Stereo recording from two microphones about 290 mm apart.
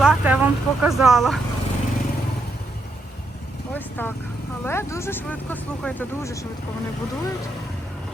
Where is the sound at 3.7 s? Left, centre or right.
Centre.